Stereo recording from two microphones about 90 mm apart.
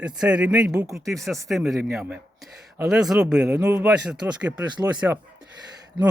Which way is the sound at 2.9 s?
5° right (ahead or behind).